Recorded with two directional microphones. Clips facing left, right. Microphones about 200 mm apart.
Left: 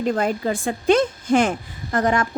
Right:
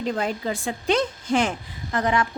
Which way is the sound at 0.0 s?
50° left (ahead or behind).